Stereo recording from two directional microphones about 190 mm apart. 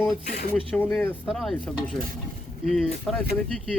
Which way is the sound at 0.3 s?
50° left (ahead or behind).